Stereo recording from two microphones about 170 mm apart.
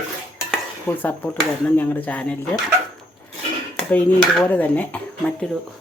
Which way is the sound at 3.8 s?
5° left (ahead or behind).